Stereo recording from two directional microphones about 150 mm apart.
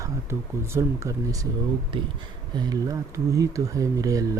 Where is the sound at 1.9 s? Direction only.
35° right (ahead or behind).